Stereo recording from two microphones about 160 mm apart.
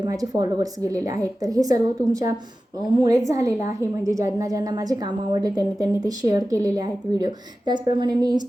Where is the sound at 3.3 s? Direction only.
20° right (ahead or behind).